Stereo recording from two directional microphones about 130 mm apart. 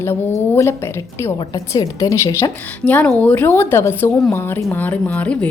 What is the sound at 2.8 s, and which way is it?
A woman's voice, 10° left (ahead or behind).